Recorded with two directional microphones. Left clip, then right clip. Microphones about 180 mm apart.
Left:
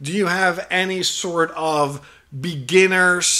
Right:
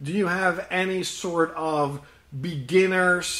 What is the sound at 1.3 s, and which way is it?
Speech, 30° left (ahead or behind).